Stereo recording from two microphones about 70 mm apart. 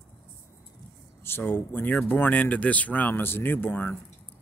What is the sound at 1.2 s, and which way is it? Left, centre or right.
A man's voice, left.